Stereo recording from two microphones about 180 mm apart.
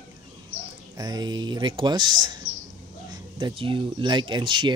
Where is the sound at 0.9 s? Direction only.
20° right (ahead or behind).